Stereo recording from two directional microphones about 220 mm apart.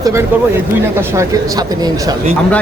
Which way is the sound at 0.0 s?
10° right (ahead or behind).